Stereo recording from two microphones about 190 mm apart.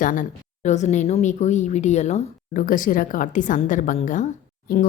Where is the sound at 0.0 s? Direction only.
45° left (ahead or behind).